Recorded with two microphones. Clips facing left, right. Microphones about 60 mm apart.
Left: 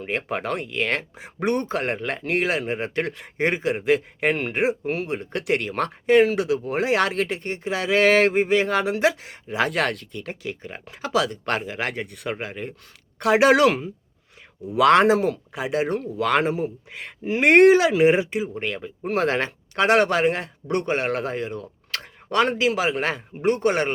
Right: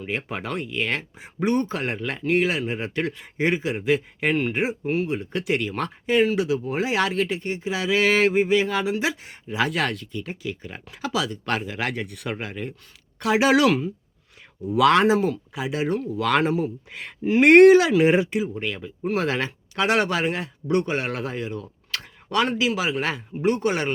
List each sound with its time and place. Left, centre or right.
0.0 s speech: left
1.4 s speech: left
4.9 s speech: left
9.2 s speech: left
9.6 s speech: left
10.7 s speech: left
11.1 s speech: left
11.6 s speech: left
13.1 s speech: left
14.8 s speech: left
16.1 s speech: left
18.5 s speech: left